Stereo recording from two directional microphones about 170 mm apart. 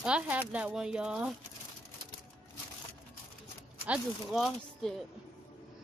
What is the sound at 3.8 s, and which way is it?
Speech, 5° right (ahead or behind).